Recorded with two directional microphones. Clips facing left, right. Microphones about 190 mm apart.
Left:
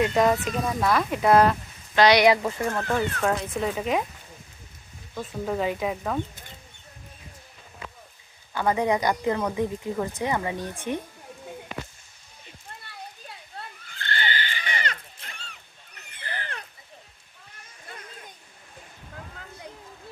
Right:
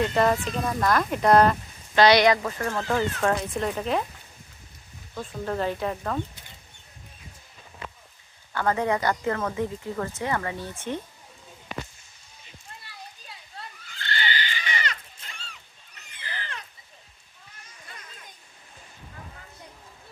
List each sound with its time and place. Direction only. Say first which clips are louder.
0.0 s speech: left 1 dB; 5° left (ahead or behind)
2.2 s speech: left 2 dB; 20° left (ahead or behind)
2.8 s speech: even; 5° right (ahead or behind)
3.2 s speech: even; 5° left (ahead or behind)
5.1 s speech: left 1 dB; 5° left (ahead or behind)
8.5 s speech: left 1 dB; 15° left (ahead or behind)
13.8 s neigh: even; 50° left (ahead or behind)
16.0 s a sound: left 2 dB; 55° left (ahead or behind)